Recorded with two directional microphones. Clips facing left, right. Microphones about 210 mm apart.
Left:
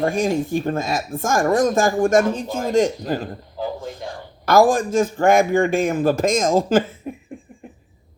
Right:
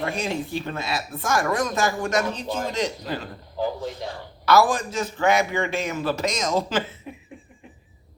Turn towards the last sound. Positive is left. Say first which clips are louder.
# left 7 dB
turn(degrees=50)  # may be behind; listen again after turning